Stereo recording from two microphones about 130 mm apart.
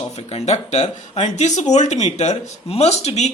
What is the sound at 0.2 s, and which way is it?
Speech, 55° left (ahead or behind).